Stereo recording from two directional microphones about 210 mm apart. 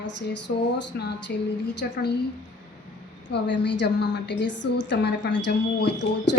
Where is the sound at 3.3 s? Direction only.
55° left (ahead or behind).